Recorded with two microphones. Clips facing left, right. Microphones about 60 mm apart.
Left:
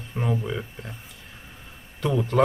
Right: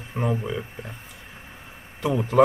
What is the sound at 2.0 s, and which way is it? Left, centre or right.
Speech, centre.